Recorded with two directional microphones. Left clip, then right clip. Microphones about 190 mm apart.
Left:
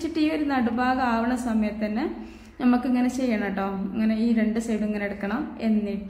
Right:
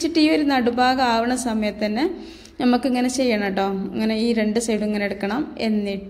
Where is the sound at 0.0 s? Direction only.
25° right (ahead or behind).